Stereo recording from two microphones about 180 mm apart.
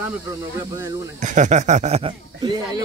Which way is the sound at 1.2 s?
40° right (ahead or behind).